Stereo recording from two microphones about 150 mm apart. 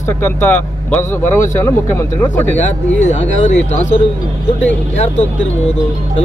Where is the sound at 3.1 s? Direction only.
50° left (ahead or behind).